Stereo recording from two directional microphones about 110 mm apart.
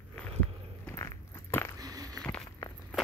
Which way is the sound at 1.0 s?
25° left (ahead or behind).